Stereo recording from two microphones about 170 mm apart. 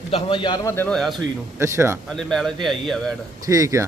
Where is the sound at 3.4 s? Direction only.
20° right (ahead or behind).